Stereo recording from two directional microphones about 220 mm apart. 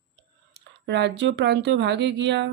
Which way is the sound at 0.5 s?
50° right (ahead or behind).